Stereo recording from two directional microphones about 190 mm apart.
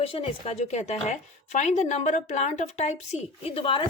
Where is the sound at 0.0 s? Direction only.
30° left (ahead or behind).